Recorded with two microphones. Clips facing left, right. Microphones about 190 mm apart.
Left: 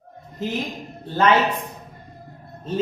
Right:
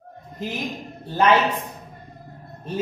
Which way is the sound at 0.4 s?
15° right (ahead or behind).